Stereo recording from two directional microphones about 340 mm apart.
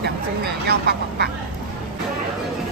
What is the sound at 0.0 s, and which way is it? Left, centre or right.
Speech, right.